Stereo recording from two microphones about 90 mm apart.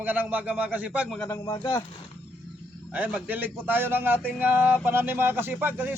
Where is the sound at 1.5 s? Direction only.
65° left (ahead or behind).